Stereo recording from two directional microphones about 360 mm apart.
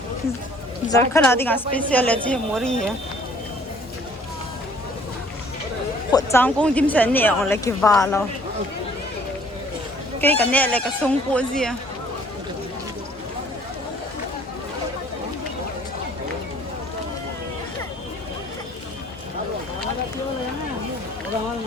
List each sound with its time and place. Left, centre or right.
0.9 s a woman's voice: centre
6.1 s speech: centre
10.2 s speech: centre